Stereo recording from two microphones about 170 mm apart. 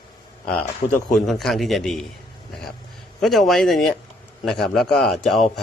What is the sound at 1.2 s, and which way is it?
Speech, centre (ahead or behind).